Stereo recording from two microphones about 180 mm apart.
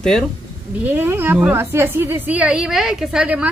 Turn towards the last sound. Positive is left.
turn(degrees=-5)  # may be behind; listen again after turning